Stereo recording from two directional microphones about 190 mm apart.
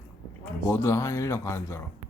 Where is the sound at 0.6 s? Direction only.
15° left (ahead or behind).